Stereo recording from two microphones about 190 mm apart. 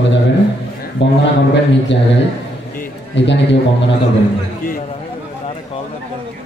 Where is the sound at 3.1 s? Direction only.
70° left (ahead or behind).